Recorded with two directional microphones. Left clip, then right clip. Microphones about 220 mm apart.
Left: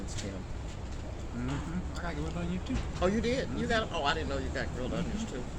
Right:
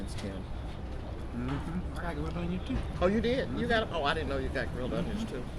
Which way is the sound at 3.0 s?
15° right (ahead or behind).